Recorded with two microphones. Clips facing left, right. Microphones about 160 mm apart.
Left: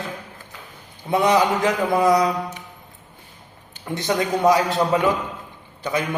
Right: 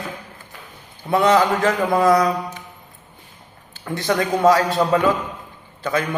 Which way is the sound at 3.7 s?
20° left (ahead or behind).